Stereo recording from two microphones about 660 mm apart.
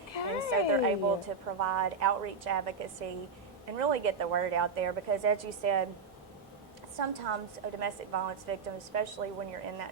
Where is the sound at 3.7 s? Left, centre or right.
Right.